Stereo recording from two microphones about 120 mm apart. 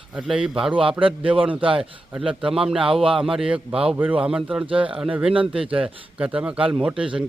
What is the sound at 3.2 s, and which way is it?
A man's voice, 5° right (ahead or behind).